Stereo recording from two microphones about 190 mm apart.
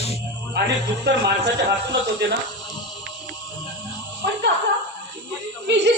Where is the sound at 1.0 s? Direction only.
60° right (ahead or behind).